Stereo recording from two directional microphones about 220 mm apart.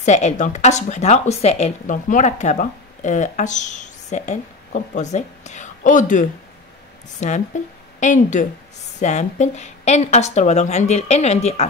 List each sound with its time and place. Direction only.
0.0 s speech: 30° left (ahead or behind)